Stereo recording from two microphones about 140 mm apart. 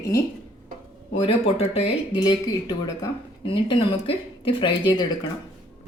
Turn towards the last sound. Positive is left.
turn(degrees=35)  # may be behind; listen again after turning